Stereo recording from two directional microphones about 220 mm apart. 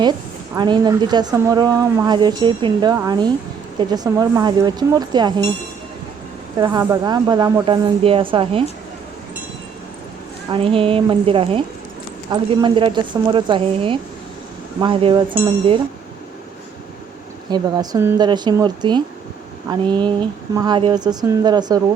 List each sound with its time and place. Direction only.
0.5 s speech: 20° right (ahead or behind)
6.6 s speech: 15° right (ahead or behind)
10.5 s speech: 25° right (ahead or behind)
17.5 s speech: 15° right (ahead or behind)